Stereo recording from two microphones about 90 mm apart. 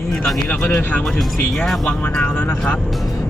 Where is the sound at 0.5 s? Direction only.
20° left (ahead or behind).